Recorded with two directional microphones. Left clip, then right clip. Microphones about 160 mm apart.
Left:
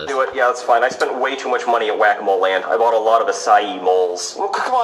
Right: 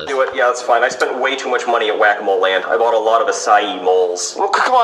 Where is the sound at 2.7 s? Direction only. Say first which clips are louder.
Even; 35° right (ahead or behind).